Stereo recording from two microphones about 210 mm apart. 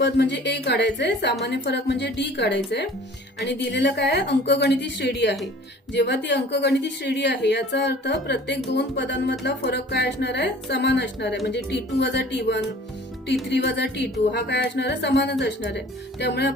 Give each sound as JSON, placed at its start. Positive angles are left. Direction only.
{"t": 0.0, "sound": "a woman's voice", "side_deg": 55}